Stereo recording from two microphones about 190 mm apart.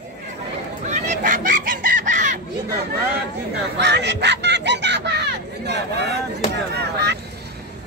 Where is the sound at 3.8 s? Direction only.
60° right (ahead or behind).